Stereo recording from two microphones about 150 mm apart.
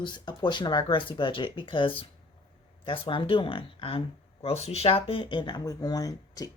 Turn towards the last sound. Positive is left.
turn(degrees=25)  # may be behind; listen again after turning